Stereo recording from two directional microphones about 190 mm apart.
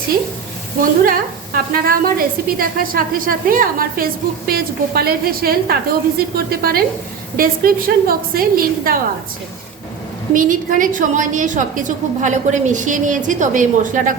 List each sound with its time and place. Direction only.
0.8 s a woman's voice: 50° right (ahead or behind)
10.3 s a woman's voice: 45° right (ahead or behind)